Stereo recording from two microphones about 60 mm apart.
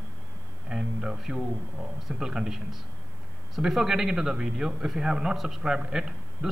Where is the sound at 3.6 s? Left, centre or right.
Centre.